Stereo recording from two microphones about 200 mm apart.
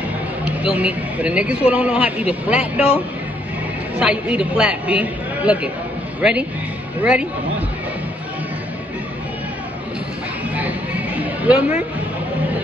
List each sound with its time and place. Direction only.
0.5 s speech: 5° right (ahead or behind)
4.0 s speech: 5° right (ahead or behind)
7.0 s speech: 5° right (ahead or behind)
11.1 s a sound: 5° right (ahead or behind)